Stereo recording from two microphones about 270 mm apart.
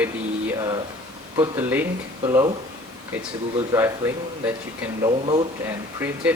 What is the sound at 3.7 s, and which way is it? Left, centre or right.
Speech, centre.